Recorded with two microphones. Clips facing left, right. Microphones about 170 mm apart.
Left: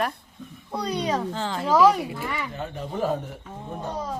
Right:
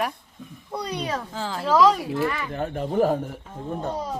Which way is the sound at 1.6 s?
10° left (ahead or behind).